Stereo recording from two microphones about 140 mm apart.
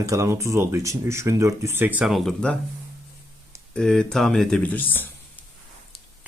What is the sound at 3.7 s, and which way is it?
Speech, 5° left (ahead or behind).